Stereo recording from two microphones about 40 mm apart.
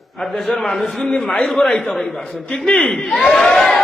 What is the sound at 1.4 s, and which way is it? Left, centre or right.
Speech, centre.